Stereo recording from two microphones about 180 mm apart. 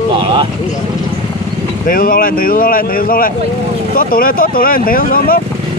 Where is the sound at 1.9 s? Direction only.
55° left (ahead or behind).